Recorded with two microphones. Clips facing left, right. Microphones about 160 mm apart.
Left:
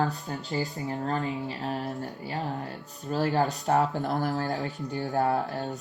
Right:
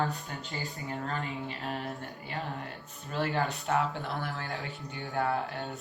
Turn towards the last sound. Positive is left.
turn(degrees=40)  # may be behind; listen again after turning